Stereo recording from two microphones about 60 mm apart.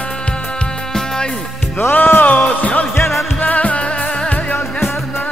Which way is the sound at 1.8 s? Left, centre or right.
Left.